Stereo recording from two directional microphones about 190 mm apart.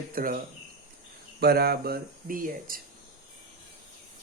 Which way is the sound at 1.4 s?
55° right (ahead or behind).